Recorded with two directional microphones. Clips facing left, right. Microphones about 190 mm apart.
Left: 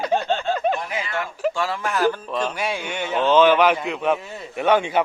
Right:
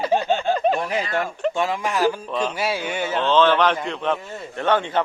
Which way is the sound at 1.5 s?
15° right (ahead or behind).